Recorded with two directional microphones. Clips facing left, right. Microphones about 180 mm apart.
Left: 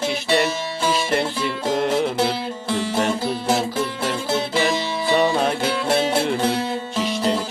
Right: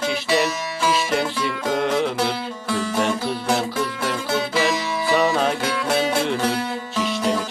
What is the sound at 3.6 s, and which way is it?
Music, 30° left (ahead or behind).